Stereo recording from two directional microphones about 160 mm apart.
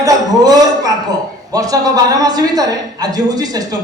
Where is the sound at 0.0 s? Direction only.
25° right (ahead or behind).